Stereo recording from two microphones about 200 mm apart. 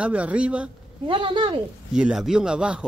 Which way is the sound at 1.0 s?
25° right (ahead or behind).